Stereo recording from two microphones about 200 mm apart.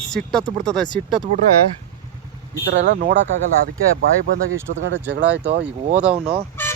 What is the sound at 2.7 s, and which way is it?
Speech, 60° right (ahead or behind).